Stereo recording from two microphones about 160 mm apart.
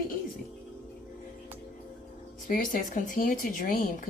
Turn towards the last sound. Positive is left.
turn(degrees=55)  # may be behind; listen again after turning